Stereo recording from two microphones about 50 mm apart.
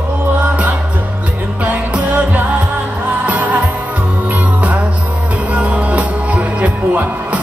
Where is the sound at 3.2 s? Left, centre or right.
Right.